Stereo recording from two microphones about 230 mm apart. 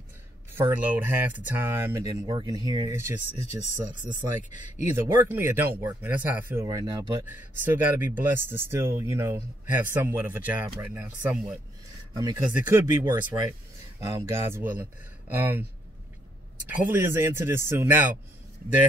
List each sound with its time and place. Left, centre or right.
0.6 s speech: centre
3.3 s speech: left
5.3 s speech: centre
16.6 s speech: centre